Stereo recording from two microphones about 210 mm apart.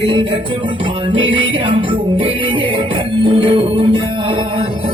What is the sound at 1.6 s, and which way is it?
Music, 25° right (ahead or behind).